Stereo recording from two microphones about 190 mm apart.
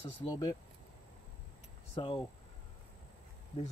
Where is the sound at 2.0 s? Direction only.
25° left (ahead or behind).